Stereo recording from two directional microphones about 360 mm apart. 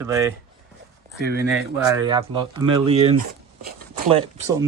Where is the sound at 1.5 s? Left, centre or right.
Centre.